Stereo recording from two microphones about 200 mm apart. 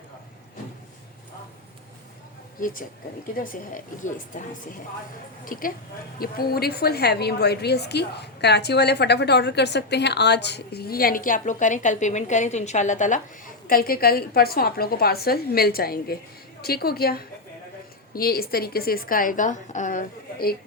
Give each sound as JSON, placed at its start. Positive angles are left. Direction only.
{"t": 2.6, "sound": "a woman's voice", "side_deg": 40}